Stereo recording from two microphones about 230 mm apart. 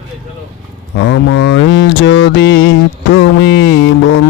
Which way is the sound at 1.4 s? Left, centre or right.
Left.